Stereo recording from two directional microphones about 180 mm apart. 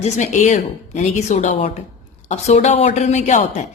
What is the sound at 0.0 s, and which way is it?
A woman's voice, 40° left (ahead or behind).